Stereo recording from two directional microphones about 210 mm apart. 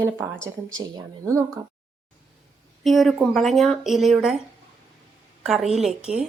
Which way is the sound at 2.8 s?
Centre (ahead or behind).